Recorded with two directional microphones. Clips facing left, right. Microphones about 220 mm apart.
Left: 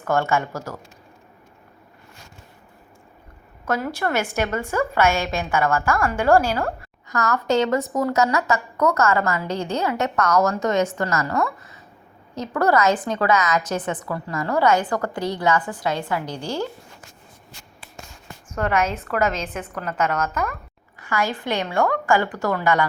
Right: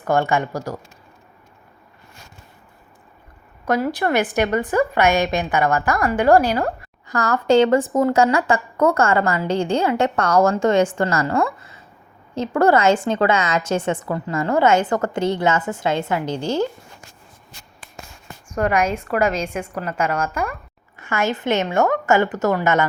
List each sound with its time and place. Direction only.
0.0 s a woman's voice: 15° right (ahead or behind)
3.7 s a woman's voice: 15° right (ahead or behind)
7.1 s a woman's voice: 30° right (ahead or behind)
18.5 s a woman's voice: 15° right (ahead or behind)
21.0 s a woman's voice: 25° right (ahead or behind)